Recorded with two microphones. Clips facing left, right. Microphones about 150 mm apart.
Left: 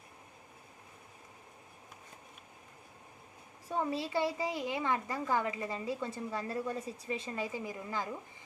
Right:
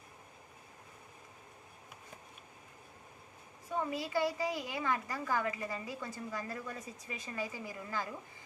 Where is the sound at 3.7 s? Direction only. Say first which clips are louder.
Left 2 dB; 30° left (ahead or behind).